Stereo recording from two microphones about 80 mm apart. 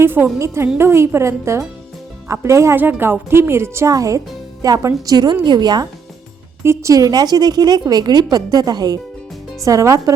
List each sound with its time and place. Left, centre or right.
0.0 s a woman's voice: right
2.7 s a woman's voice: right
5.1 s a woman's voice: right
6.6 s a woman's voice: right
9.6 s speech: right